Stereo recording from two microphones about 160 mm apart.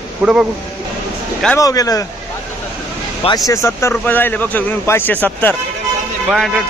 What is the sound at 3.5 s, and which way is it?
Speech, 20° left (ahead or behind).